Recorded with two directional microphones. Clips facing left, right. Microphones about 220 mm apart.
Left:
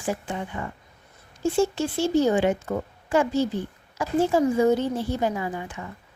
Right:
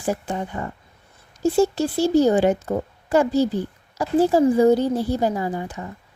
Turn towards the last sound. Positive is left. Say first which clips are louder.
# right 4 dB
turn(degrees=-35)  # may be behind; listen again after turning